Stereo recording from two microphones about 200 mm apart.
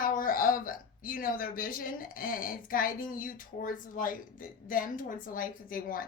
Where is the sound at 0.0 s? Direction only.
45° left (ahead or behind).